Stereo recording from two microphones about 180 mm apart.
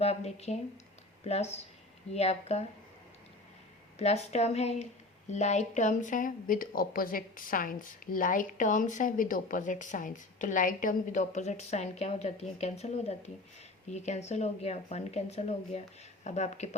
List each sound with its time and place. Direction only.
0.0 s speech: 35° left (ahead or behind)
3.9 s speech: 35° left (ahead or behind)